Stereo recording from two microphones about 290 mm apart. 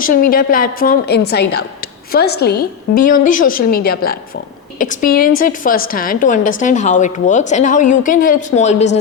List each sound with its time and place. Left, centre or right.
0.0 s a woman's voice: left